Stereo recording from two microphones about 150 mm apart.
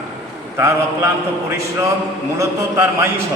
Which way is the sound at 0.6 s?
20° right (ahead or behind).